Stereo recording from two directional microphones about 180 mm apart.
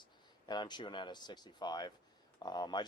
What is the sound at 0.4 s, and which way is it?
Speech, 25° left (ahead or behind).